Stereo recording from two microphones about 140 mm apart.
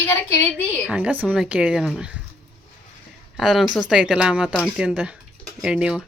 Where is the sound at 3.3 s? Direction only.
Centre (ahead or behind).